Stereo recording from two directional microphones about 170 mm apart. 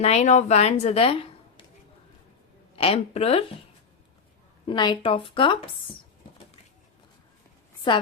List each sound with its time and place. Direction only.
0.0 s a woman's voice: 40° left (ahead or behind)
2.7 s speech: 35° left (ahead or behind)
4.6 s speech: 25° left (ahead or behind)